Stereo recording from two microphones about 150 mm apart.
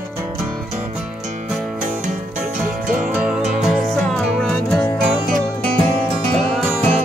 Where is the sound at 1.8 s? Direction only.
60° right (ahead or behind).